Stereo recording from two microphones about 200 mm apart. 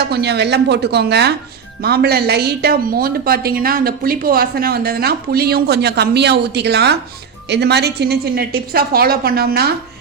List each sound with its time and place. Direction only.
0.0 s a woman's voice: 55° right (ahead or behind)